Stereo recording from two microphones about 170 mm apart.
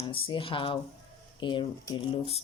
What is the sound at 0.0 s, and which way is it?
Speech, 30° left (ahead or behind).